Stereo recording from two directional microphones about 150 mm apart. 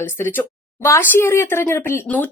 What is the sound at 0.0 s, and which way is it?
A child's voice, 15° left (ahead or behind).